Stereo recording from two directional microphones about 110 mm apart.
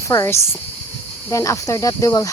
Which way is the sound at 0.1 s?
30° left (ahead or behind).